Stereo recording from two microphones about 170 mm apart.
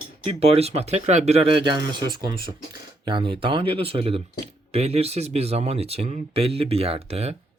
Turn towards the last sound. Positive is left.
turn(degrees=-40)  # may be behind; listen again after turning